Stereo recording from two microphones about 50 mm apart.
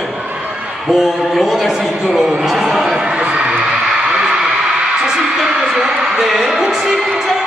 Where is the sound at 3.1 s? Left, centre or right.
Right.